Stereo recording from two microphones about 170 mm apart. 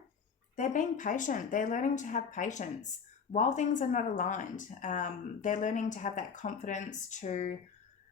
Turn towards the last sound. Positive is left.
turn(degrees=45)  # may be behind; listen again after turning